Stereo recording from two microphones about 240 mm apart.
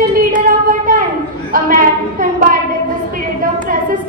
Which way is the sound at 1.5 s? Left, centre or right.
Right.